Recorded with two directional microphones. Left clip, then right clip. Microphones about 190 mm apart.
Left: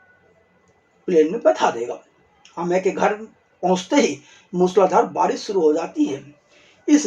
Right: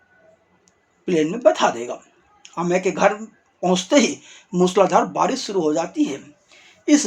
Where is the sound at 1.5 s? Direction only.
30° right (ahead or behind).